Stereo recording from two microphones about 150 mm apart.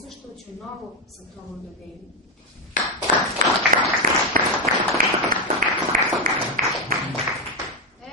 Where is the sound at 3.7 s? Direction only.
60° right (ahead or behind).